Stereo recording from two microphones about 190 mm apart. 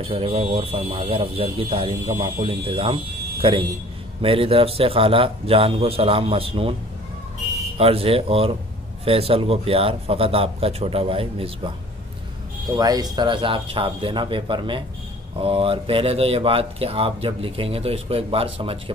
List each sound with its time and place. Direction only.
0.0 s speech: 30° right (ahead or behind)
7.7 s speech: 30° right (ahead or behind)
12.7 s speech: 20° right (ahead or behind)